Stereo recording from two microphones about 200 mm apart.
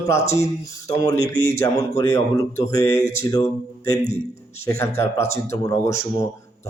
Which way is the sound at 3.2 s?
20° left (ahead or behind).